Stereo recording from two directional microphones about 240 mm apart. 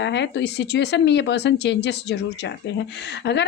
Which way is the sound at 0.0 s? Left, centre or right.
Left.